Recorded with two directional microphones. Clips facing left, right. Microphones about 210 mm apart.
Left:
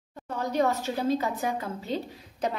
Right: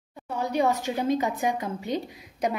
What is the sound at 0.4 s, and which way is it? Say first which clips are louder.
A woman's voice: right 1 dB; 10° right (ahead or behind).